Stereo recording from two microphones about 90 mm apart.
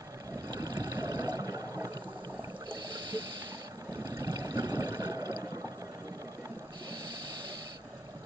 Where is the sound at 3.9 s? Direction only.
40° right (ahead or behind).